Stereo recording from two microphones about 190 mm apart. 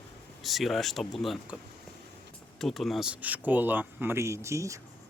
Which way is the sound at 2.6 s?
Centre (ahead or behind).